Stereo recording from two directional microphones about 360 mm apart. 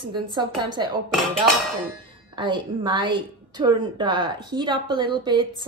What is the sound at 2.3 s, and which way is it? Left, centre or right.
A woman's voice, centre.